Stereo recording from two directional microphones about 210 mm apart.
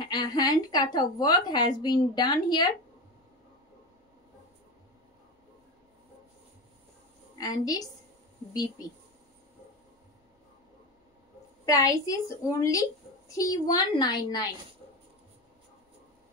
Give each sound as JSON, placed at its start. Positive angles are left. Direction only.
{"t": 0.0, "sound": "a woman's voice", "side_deg": 20}
{"t": 7.3, "sound": "a woman's voice", "side_deg": 15}
{"t": 11.6, "sound": "a woman's voice", "side_deg": 15}